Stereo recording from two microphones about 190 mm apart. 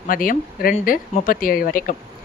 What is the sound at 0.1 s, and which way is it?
Speech, 50° left (ahead or behind).